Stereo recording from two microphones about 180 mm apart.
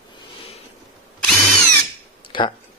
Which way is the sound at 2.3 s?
25° left (ahead or behind).